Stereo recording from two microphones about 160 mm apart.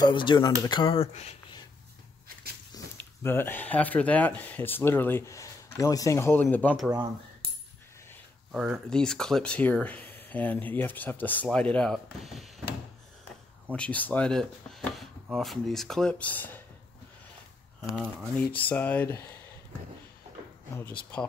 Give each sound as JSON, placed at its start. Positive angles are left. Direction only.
{"t": 0.0, "sound": "speech", "side_deg": 30}
{"t": 2.7, "sound": "speech", "side_deg": 15}
{"t": 8.5, "sound": "speech", "side_deg": -5}
{"t": 13.7, "sound": "speech", "side_deg": 10}
{"t": 17.9, "sound": "speech", "side_deg": 10}